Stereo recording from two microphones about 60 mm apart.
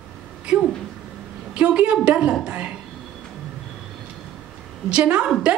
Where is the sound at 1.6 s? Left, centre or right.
Centre.